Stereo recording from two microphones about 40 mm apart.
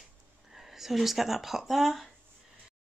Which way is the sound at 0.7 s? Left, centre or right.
Centre.